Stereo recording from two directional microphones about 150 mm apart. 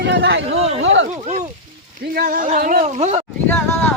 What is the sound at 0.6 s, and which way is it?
Speech, 45° right (ahead or behind).